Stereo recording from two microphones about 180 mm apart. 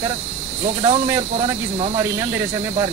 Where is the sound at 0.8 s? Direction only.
20° right (ahead or behind).